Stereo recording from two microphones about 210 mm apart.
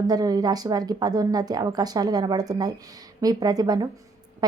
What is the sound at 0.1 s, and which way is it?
A woman's voice, 20° right (ahead or behind).